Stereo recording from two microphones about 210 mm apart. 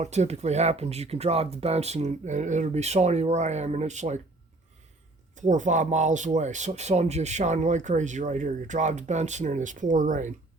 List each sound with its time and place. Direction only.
0.0 s speech: 35° right (ahead or behind)
5.4 s speech: 35° right (ahead or behind)